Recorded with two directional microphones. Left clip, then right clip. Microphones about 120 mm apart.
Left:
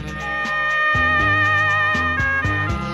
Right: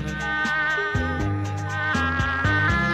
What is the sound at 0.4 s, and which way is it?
Music, 40° right (ahead or behind).